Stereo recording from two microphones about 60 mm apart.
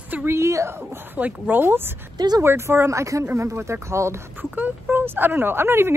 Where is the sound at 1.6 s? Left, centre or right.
Right.